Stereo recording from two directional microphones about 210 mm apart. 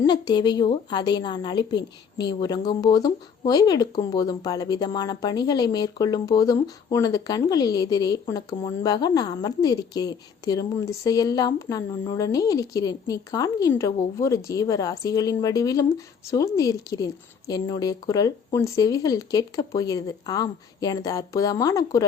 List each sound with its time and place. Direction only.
0.0 s a woman's voice: 20° left (ahead or behind)